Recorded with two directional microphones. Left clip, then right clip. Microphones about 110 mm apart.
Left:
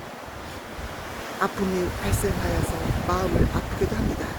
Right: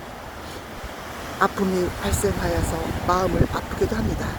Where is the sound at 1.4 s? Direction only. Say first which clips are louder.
Right 4 dB; 45° right (ahead or behind).